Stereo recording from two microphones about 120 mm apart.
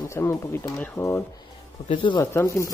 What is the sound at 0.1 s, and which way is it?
Speech, 25° left (ahead or behind).